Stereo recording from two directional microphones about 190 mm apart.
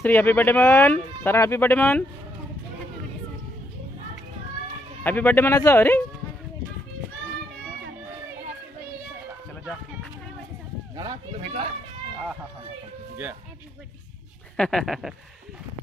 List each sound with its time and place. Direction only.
0.0 s speech: 10° left (ahead or behind)
5.0 s speech: 10° left (ahead or behind)
11.0 s speech: 25° right (ahead or behind)
14.6 s speech: 5° left (ahead or behind)